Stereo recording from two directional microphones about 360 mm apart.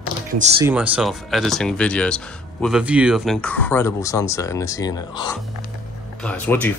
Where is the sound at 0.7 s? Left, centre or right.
Centre.